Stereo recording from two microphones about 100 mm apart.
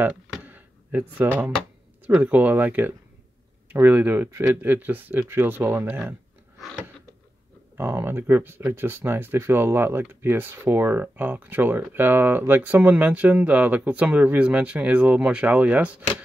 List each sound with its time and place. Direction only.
0.5 s a sound: 15° right (ahead or behind)
2.0 s speech: 15° right (ahead or behind)
7.7 s speech: 25° right (ahead or behind)